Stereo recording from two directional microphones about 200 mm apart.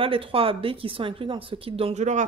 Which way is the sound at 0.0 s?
25° right (ahead or behind).